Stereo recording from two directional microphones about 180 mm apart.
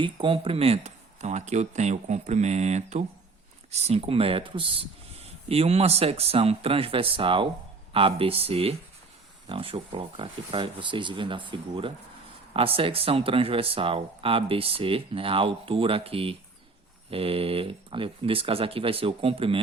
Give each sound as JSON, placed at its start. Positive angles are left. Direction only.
{"t": 0.0, "sound": "speech", "side_deg": -30}